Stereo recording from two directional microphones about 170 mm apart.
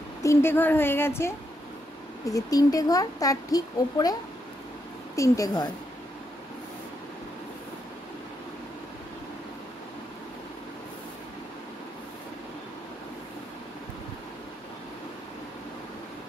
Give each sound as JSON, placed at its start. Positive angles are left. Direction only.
{"t": 0.2, "sound": "a woman's voice", "side_deg": 15}